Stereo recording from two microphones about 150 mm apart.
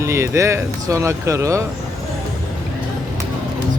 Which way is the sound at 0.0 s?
20° right (ahead or behind).